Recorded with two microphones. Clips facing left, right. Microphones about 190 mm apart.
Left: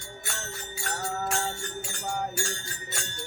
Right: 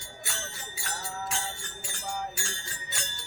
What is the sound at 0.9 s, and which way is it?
Music, 50° left (ahead or behind).